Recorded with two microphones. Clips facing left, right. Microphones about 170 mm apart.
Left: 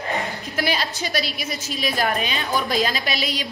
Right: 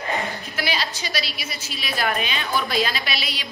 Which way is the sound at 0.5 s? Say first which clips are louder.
Left 4 dB; 45° left (ahead or behind).